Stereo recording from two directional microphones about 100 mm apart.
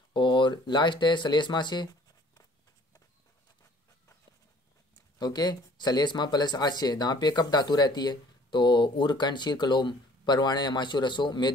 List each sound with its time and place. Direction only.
0.1 s speech: 55° left (ahead or behind)
5.2 s speech: 45° left (ahead or behind)